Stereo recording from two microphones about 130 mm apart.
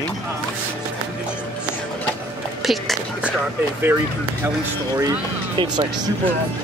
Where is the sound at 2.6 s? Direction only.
Centre (ahead or behind).